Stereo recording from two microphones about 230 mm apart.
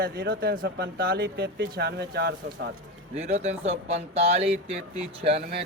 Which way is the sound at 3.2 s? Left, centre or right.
Right.